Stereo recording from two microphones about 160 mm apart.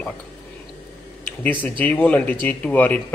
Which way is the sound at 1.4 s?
10° left (ahead or behind).